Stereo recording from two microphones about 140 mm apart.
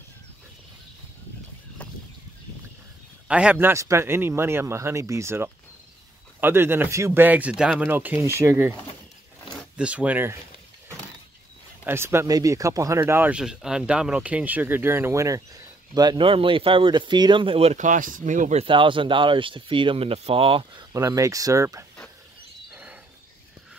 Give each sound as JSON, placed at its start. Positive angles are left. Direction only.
{"t": 3.3, "sound": "speech", "side_deg": -10}
{"t": 9.8, "sound": "speech", "side_deg": -10}
{"t": 11.8, "sound": "speech", "side_deg": -15}
{"t": 17.8, "sound": "speech", "side_deg": -70}
{"t": 18.6, "sound": "speech", "side_deg": -35}
{"t": 20.9, "sound": "speech", "side_deg": -25}
{"t": 22.7, "sound": "wild animals", "side_deg": -10}